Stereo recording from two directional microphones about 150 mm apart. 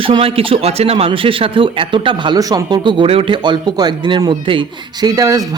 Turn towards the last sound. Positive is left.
turn(degrees=-25)  # may be behind; listen again after turning